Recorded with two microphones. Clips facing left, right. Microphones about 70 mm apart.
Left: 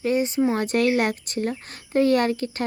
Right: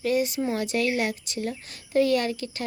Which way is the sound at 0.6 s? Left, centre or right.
Left.